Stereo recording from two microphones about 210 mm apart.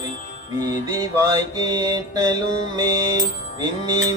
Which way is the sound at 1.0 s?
15° right (ahead or behind).